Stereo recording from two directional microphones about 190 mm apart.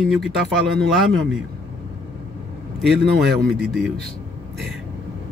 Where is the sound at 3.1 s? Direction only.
55° right (ahead or behind).